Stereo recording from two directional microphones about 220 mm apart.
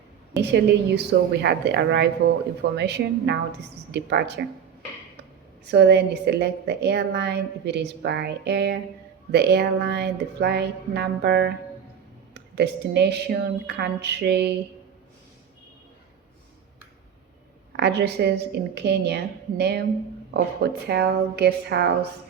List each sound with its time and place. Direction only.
0.3 s a woman's voice: 50° right (ahead or behind)
5.6 s a woman's voice: 50° right (ahead or behind)
17.7 s a woman's voice: 50° right (ahead or behind)